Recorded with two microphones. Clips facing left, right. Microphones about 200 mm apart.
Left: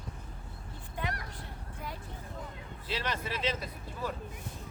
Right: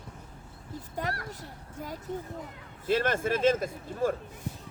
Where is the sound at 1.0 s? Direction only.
40° right (ahead or behind).